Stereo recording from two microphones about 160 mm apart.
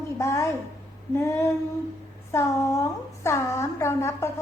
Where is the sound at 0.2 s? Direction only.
20° left (ahead or behind).